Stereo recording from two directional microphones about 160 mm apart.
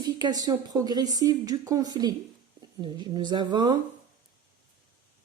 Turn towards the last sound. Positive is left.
turn(degrees=-25)  # may be behind; listen again after turning